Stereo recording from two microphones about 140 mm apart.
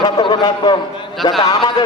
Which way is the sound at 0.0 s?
30° left (ahead or behind).